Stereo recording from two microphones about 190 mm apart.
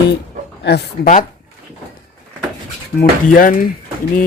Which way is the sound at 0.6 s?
60° left (ahead or behind).